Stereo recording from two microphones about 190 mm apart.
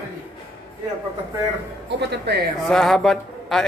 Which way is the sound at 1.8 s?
60° right (ahead or behind).